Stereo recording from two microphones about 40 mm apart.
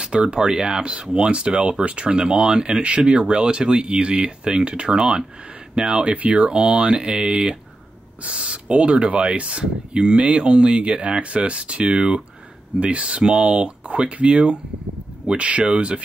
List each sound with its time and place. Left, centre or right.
0.0 s speech: right
13.3 s speech: centre
13.6 s speech: right